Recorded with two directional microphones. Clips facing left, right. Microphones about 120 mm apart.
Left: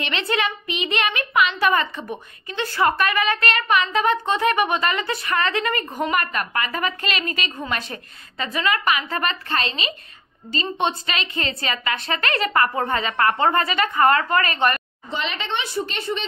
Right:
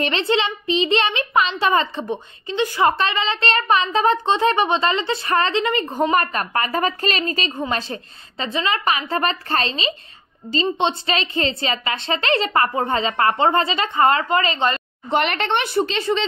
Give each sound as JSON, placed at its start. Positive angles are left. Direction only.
{"t": 0.0, "sound": "a woman's voice", "side_deg": -30}
{"t": 15.0, "sound": "a woman's voice", "side_deg": -60}